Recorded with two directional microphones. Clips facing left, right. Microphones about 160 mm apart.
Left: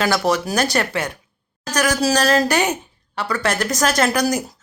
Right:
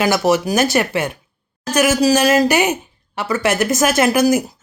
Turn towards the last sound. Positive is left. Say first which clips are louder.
# right 5 dB
turn(degrees=-10)  # may be behind; listen again after turning